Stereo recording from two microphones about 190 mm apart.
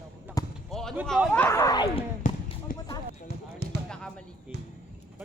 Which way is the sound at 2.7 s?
45° left (ahead or behind).